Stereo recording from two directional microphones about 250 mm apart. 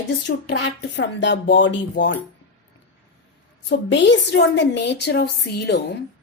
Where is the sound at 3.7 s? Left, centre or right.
Left.